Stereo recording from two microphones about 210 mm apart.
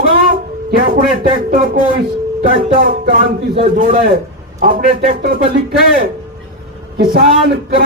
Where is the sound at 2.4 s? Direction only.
45° right (ahead or behind).